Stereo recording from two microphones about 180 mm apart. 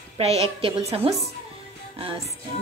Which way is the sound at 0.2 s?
35° right (ahead or behind).